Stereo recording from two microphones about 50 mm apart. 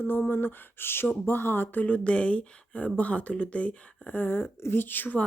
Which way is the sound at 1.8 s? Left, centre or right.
Left.